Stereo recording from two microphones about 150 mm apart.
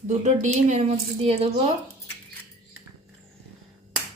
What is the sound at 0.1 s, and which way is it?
Speech, 50° right (ahead or behind).